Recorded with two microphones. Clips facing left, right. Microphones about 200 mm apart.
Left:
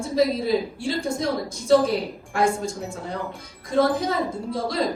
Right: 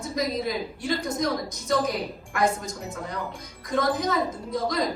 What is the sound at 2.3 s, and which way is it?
Speech, 30° left (ahead or behind).